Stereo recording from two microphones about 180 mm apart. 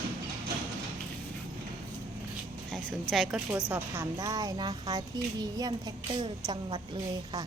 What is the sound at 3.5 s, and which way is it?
A woman's voice, 10° right (ahead or behind).